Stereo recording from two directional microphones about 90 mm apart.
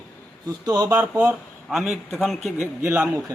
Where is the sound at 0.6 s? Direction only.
50° right (ahead or behind).